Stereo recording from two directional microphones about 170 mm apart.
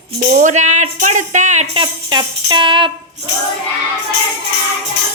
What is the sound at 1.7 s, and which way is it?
Jingle bell, 30° right (ahead or behind).